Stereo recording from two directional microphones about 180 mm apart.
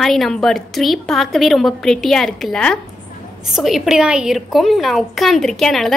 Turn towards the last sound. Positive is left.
turn(degrees=0)  # may be behind; listen again after turning